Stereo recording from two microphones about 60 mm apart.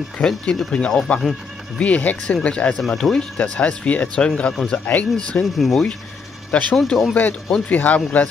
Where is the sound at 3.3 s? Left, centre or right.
Centre.